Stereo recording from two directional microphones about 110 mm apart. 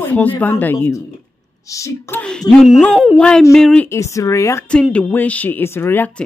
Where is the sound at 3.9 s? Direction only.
25° left (ahead or behind).